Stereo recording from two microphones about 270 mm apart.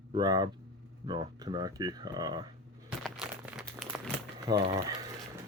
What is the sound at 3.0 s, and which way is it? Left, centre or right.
Crumpling, centre.